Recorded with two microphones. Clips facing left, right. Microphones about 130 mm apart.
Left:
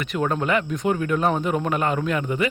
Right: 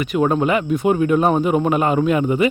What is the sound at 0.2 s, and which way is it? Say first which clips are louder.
Speech: right 5 dB; 15° right (ahead or behind).